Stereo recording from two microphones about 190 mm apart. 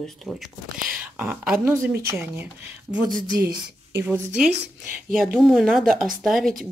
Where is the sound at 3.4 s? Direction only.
50° right (ahead or behind).